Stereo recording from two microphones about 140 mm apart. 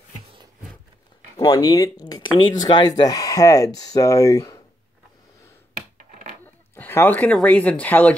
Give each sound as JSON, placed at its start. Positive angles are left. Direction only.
{"t": 1.3, "sound": "speech", "side_deg": 30}
{"t": 6.4, "sound": "a sound", "side_deg": 15}
{"t": 7.3, "sound": "speech", "side_deg": 10}